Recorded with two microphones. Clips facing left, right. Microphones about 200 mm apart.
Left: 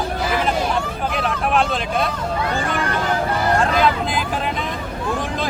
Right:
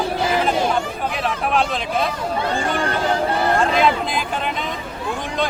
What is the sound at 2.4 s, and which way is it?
Speech, 30° right (ahead or behind).